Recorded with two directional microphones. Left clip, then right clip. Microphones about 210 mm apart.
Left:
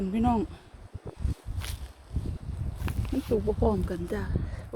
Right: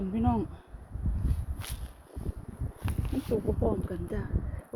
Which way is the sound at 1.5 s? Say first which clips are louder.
Left 2 dB; centre (ahead or behind).